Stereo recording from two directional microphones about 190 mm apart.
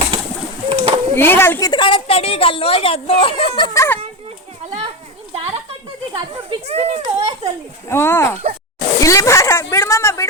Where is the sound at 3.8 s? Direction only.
10° left (ahead or behind).